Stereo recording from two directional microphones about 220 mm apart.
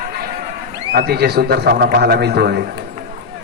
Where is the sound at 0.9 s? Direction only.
45° right (ahead or behind).